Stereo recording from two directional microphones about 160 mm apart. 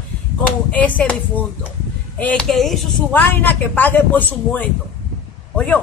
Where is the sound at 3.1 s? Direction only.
10° left (ahead or behind).